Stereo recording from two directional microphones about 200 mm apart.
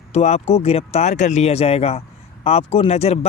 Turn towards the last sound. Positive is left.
turn(degrees=30)  # may be behind; listen again after turning